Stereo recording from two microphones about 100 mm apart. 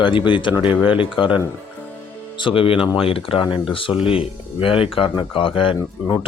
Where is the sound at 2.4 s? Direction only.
65° left (ahead or behind).